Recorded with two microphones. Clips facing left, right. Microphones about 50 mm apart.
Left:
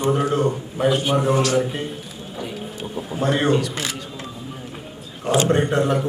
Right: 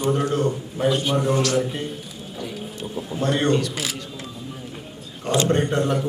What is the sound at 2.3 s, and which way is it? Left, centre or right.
Mechanisms, centre.